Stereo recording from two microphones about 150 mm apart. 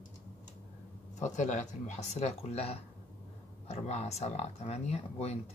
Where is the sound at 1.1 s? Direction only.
50° left (ahead or behind).